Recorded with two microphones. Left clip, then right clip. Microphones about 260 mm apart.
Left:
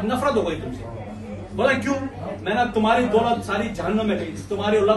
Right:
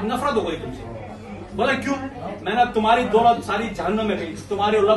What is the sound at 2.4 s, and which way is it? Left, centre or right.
A man's voice, centre.